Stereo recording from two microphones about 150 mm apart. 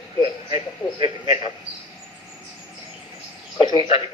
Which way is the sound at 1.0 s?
40° left (ahead or behind).